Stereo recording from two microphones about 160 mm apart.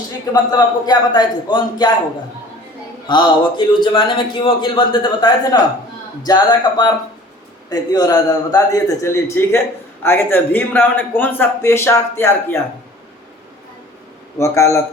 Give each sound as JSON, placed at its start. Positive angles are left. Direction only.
{"t": 0.5, "sound": "a man's voice", "side_deg": 25}
{"t": 3.1, "sound": "a man's voice", "side_deg": 30}
{"t": 14.3, "sound": "a man's voice", "side_deg": 15}